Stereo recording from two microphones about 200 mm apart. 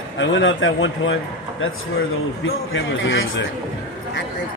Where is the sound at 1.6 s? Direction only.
85° left.